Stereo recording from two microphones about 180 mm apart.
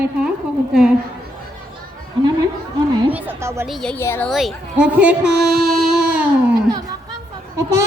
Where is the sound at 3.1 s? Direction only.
10° right (ahead or behind).